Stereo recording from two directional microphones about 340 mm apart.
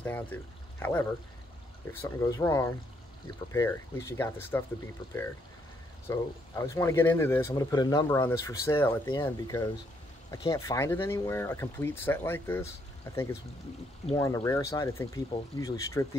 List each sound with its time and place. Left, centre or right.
0.0 s speech: centre
6.0 s speech: centre